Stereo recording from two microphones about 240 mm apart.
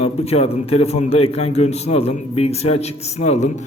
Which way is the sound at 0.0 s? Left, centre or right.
Left.